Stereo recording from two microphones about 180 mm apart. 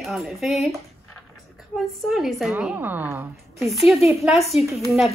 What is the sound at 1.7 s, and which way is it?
A woman's voice, centre (ahead or behind).